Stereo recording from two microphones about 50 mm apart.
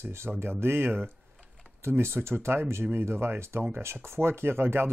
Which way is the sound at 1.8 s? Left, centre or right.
Right.